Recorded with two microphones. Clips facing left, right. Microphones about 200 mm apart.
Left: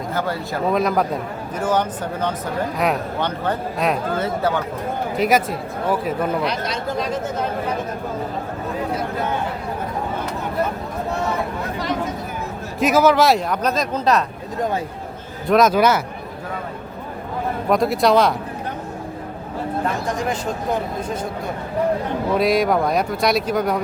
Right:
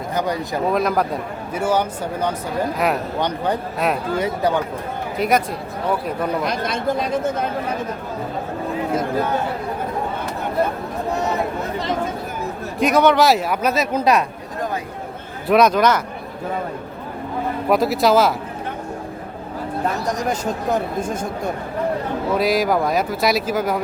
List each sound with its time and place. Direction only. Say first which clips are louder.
0.1 s speech: right 3 dB; 15° right (ahead or behind)
0.7 s a man's voice: left 1 dB; centre (ahead or behind)
3.2 s speech: right 1 dB; 15° right (ahead or behind)
3.8 s a man's voice: left 2 dB; centre (ahead or behind)
4.2 s speech: right 1 dB; 15° right (ahead or behind)
5.1 s a man's voice: even; centre (ahead or behind)
6.4 s speech: right 2 dB; 50° right (ahead or behind)
12.8 s speech: even; centre (ahead or behind)
15.4 s a man's voice: even; centre (ahead or behind)
17.7 s a man's voice: even; centre (ahead or behind)
20.1 s speech: right 1 dB; 40° right (ahead or behind)
22.4 s a man's voice: left 1 dB; centre (ahead or behind)